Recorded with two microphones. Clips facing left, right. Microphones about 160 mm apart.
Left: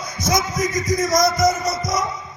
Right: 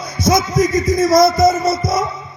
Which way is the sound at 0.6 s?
25° right (ahead or behind).